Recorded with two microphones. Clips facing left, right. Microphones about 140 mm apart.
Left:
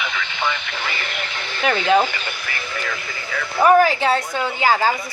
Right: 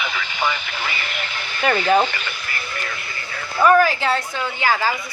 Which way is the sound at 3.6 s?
15° left (ahead or behind).